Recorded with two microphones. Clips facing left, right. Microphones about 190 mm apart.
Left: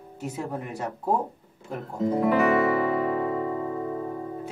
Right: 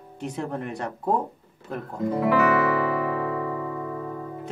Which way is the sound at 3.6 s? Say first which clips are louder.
Left 2 dB; 30° left (ahead or behind).